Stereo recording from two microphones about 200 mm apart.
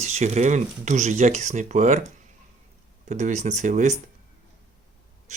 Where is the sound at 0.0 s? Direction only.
35° right (ahead or behind).